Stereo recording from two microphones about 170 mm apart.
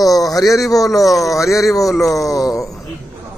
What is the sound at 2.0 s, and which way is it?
Speech, 20° left (ahead or behind).